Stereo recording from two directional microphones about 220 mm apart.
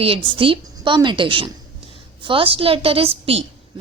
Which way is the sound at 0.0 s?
25° right (ahead or behind).